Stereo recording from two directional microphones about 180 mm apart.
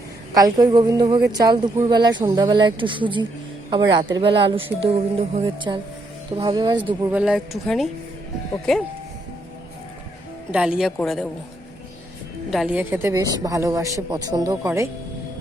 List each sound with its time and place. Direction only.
0.3 s speech: 20° right (ahead or behind)
7.1 s a woman's voice: 5° right (ahead or behind)
10.5 s a woman's voice: 5° right (ahead or behind)
12.5 s a woman's voice: 5° right (ahead or behind)